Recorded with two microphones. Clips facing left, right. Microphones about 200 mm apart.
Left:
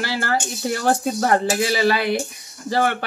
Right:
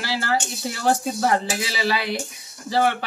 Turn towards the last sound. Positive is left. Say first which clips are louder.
# even
turn(degrees=50)  # may be behind; listen again after turning